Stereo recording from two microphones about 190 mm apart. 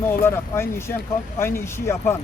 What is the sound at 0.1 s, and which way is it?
Speech, 10° left (ahead or behind).